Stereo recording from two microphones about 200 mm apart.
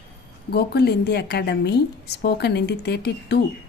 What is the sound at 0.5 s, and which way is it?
A woman's voice, 55° left (ahead or behind).